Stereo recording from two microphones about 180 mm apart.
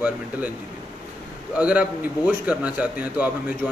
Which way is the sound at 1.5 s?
5° right (ahead or behind).